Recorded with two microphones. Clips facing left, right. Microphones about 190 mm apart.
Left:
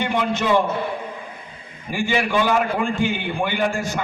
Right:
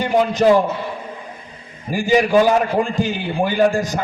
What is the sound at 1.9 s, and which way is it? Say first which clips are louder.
A man's voice: right 6 dB; 40° right (ahead or behind).